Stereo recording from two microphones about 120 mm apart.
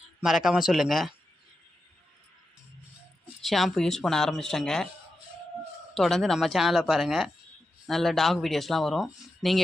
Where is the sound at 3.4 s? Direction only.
Centre (ahead or behind).